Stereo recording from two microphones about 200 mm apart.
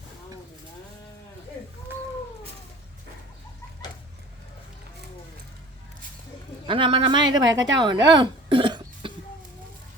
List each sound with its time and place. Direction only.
6.7 s speech: 25° right (ahead or behind)
8.1 s cough: 25° right (ahead or behind)